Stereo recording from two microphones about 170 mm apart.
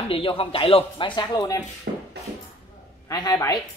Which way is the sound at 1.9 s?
65° right (ahead or behind).